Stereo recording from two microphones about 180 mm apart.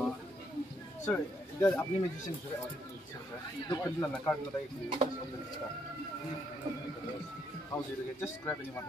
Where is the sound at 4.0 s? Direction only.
10° left (ahead or behind).